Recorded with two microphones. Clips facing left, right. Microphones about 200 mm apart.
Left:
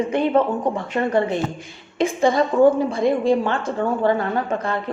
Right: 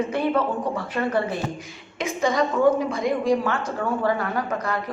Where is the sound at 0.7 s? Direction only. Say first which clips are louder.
Left 4 dB; 25° left (ahead or behind).